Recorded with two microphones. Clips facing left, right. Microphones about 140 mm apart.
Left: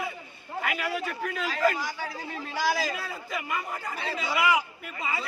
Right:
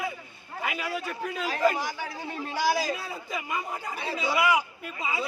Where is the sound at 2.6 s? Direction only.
15° right (ahead or behind).